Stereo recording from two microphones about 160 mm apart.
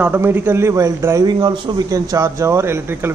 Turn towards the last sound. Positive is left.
turn(degrees=-15)  # may be behind; listen again after turning